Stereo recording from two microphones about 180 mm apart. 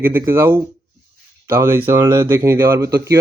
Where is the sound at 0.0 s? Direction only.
15° right (ahead or behind).